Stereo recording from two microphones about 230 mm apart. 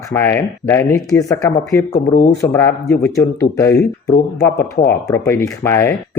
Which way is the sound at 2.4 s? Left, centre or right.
Centre.